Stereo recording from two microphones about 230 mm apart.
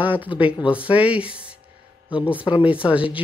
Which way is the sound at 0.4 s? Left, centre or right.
Centre.